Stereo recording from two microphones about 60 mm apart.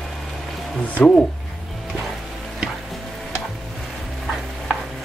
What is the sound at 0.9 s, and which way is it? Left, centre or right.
Speech, left.